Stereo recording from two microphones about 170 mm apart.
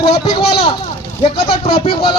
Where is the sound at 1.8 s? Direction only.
30° left (ahead or behind).